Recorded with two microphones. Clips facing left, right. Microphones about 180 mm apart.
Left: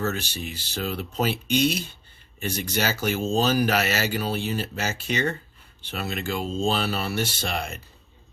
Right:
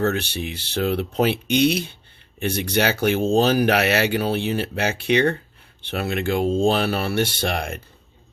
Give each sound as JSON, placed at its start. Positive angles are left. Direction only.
{"t": 0.0, "sound": "speech", "side_deg": -60}